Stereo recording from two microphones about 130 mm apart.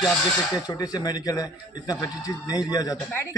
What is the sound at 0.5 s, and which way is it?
A man's voice, 30° left (ahead or behind).